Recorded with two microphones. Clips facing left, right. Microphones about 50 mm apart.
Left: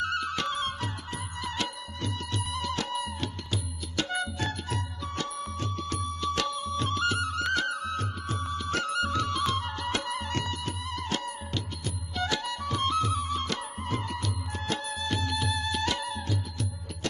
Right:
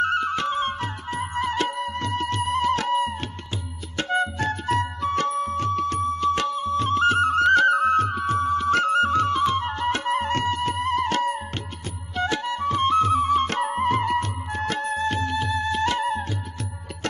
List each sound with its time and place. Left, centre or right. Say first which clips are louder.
0.0 s music: right 7 dB; right